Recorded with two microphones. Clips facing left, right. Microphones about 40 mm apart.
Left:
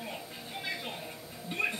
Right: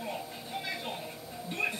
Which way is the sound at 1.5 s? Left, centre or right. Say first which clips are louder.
Left 1 dB; centre.